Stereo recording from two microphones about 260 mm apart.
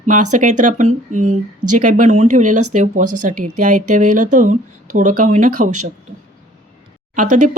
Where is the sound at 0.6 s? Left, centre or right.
Right.